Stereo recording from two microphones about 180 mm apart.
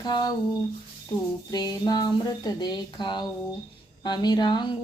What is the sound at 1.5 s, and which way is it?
Speech, 20° left (ahead or behind).